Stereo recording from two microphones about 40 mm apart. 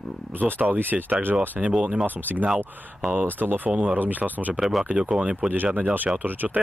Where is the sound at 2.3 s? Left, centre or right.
Right.